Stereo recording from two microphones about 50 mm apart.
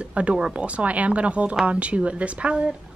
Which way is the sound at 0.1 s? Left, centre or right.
Right.